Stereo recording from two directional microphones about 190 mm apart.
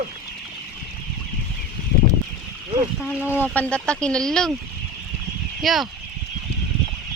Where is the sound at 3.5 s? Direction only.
5° left (ahead or behind).